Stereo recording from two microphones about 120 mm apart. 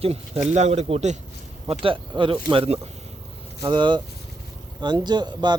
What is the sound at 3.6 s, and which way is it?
Speech, 40° right (ahead or behind).